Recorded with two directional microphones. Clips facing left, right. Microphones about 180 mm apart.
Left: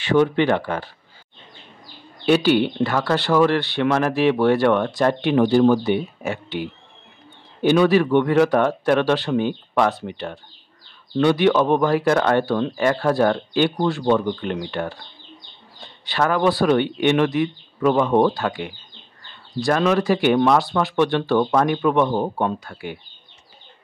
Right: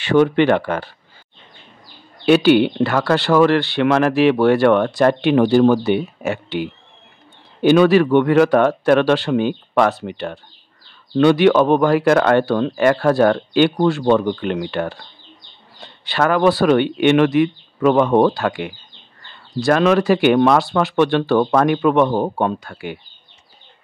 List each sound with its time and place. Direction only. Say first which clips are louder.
0.0 s speech: right 3 dB; 70° right (ahead or behind)
2.2 s speech: right 4 dB; 70° right (ahead or behind)
7.6 s speech: right 4 dB; 80° right